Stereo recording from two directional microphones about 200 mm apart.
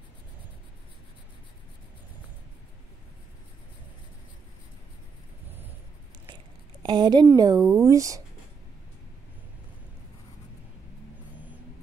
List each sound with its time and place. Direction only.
6.8 s a woman's voice: 20° right (ahead or behind)